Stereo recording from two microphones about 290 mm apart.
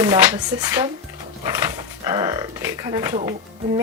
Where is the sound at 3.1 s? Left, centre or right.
Right.